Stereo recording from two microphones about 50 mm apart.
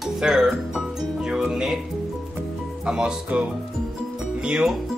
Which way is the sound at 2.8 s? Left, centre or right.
Centre.